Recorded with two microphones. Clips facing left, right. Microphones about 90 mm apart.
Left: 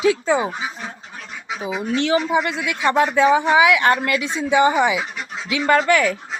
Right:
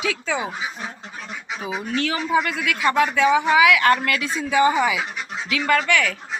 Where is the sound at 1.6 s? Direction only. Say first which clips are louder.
Left 3 dB; 20° left (ahead or behind).